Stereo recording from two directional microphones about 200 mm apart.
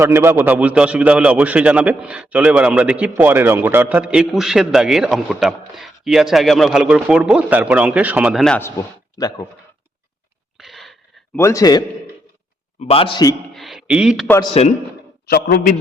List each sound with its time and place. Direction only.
0.0 s a man's voice: 10° right (ahead or behind); by 8.7 s 5° left (ahead or behind)
10.6 s wheeze: centre (ahead or behind)
11.3 s a man's voice: 15° left (ahead or behind)
12.8 s a man's voice: 30° left (ahead or behind)
13.5 s speech: centre (ahead or behind)
14.6 s a man's voice: 30° left (ahead or behind)
15.3 s a man's voice: 50° left (ahead or behind)